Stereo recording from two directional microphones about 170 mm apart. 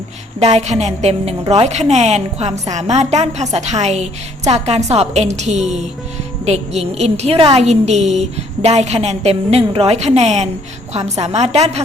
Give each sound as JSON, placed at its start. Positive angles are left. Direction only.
{"t": 0.3, "sound": "a woman's voice", "side_deg": -40}